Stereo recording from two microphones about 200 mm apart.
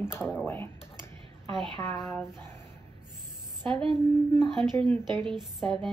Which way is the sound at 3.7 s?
25° right (ahead or behind).